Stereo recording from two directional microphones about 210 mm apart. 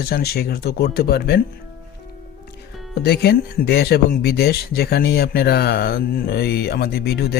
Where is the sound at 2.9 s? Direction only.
55° left (ahead or behind).